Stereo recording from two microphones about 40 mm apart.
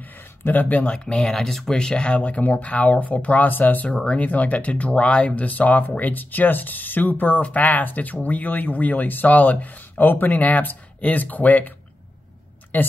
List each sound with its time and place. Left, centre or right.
0.0 s a sound: left
0.9 s speech: left
1.3 s speech: centre
1.8 s speech: left
3.8 s speech: left
4.2 s speech: left
7.4 s speech: left
12.7 s speech: left